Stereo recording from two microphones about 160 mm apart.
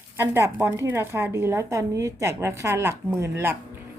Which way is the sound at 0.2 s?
15° right (ahead or behind).